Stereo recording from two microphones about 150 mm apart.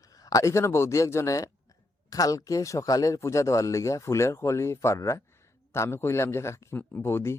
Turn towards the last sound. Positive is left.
turn(degrees=15)  # may be behind; listen again after turning